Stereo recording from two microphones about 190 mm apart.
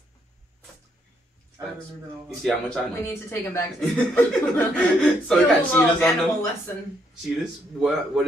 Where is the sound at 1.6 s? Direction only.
15° right (ahead or behind).